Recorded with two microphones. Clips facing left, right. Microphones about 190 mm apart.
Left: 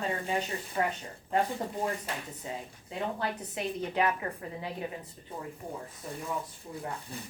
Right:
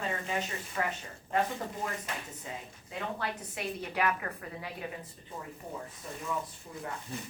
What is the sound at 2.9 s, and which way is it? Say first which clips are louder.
Speech: left 3 dB; 35° left (ahead or behind).